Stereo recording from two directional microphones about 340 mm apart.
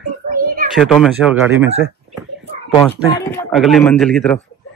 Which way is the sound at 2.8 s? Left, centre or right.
Centre.